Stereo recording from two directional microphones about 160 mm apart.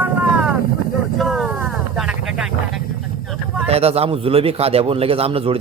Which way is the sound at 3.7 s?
40° right (ahead or behind).